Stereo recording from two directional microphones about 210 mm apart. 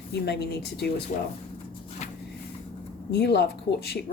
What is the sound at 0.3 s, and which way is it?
Speech, 50° left (ahead or behind).